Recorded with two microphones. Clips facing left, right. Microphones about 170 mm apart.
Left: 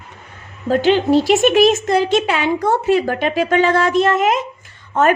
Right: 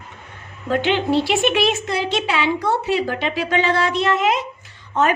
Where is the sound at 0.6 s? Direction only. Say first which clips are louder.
Left 5 dB; 40° left (ahead or behind).